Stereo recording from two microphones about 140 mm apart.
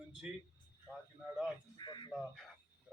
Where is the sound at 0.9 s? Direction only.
Centre (ahead or behind).